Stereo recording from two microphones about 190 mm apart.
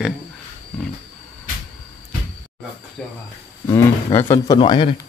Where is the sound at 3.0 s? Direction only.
Centre (ahead or behind).